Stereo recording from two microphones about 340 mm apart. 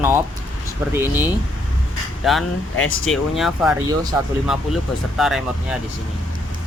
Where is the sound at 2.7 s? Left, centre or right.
Left.